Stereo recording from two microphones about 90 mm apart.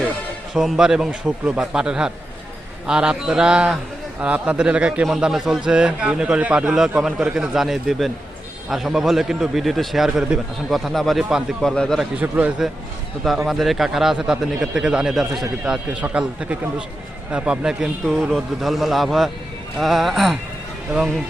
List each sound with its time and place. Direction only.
0.5 s a man's voice: 5° right (ahead or behind)
11.6 s a man's voice: 10° left (ahead or behind)
12.2 s a man's voice: 15° right (ahead or behind)
18.0 s a man's voice: 5° left (ahead or behind)